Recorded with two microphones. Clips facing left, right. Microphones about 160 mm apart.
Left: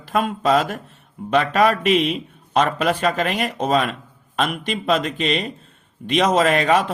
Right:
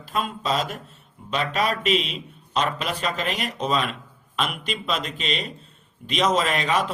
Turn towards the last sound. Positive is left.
turn(degrees=50)  # may be behind; listen again after turning